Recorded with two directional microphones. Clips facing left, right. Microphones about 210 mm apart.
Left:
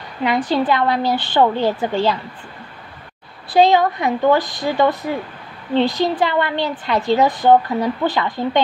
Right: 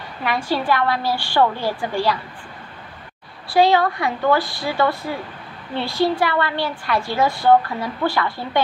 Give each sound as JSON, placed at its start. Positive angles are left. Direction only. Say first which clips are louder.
{"t": 0.2, "sound": "a woman's voice", "louder": "left 5 dB", "side_deg": 20}
{"t": 3.4, "sound": "a woman's voice", "louder": "left 2 dB", "side_deg": 20}